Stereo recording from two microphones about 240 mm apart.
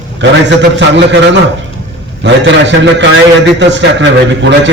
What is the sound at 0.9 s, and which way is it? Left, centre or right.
A man's voice, right.